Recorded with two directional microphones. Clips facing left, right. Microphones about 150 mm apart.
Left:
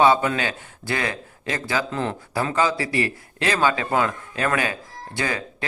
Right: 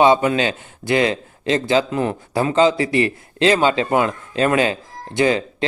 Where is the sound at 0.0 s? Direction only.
20° right (ahead or behind).